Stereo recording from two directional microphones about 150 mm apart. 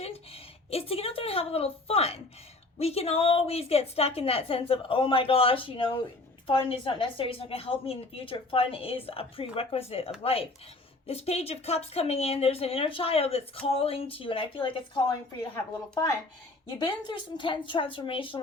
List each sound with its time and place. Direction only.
0.7 s speech: 40° left (ahead or behind)
16.6 s speech: 30° left (ahead or behind)